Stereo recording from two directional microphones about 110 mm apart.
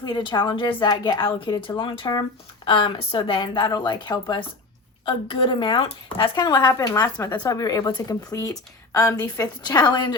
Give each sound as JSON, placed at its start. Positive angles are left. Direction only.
{"t": 0.0, "sound": "a woman's voice", "side_deg": 45}